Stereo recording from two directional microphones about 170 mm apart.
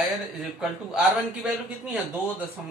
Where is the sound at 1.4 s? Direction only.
5° right (ahead or behind).